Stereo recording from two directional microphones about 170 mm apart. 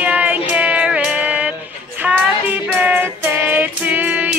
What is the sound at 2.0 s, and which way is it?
Child singing, 10° right (ahead or behind).